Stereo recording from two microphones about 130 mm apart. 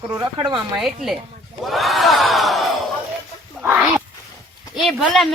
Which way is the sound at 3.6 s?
10° right (ahead or behind).